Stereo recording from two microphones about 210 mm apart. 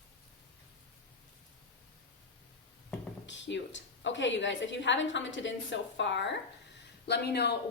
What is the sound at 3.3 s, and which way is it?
A woman's voice, 60° left (ahead or behind).